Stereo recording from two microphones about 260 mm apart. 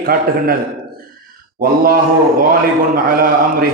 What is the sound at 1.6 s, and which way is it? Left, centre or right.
A man's voice, right.